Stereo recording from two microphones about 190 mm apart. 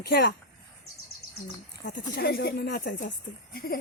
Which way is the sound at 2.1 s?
55° left (ahead or behind).